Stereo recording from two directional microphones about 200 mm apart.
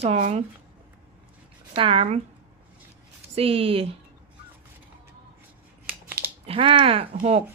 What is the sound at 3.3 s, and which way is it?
Speech, 30° right (ahead or behind).